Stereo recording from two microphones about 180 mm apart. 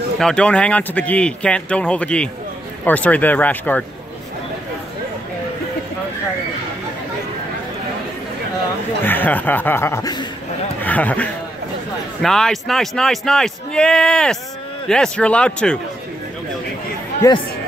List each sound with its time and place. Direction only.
0.2 s speech: 5° left (ahead or behind)
9.0 s speech: 10° left (ahead or behind)
10.8 s a man's voice: 10° left (ahead or behind)
17.2 s speech: 15° left (ahead or behind)